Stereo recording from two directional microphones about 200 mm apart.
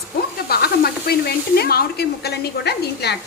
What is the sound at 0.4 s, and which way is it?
A woman's voice, 50° left (ahead or behind).